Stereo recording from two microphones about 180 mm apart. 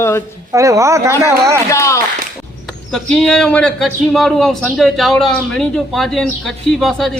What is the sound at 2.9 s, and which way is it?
A man's voice, 5° left (ahead or behind).